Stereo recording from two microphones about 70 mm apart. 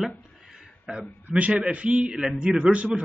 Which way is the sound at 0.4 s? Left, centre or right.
Centre.